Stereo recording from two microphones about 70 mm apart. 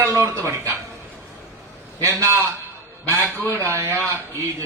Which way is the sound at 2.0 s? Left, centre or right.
Right.